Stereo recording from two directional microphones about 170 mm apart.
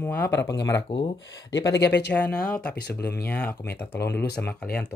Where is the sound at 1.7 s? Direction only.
80° left.